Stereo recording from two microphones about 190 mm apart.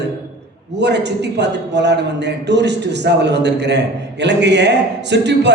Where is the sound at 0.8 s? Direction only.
65° right (ahead or behind).